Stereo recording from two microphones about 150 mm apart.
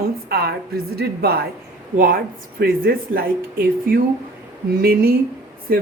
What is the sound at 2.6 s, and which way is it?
Speech, 80° right.